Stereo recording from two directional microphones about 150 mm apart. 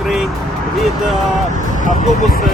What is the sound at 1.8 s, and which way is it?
Speech, 55° left (ahead or behind).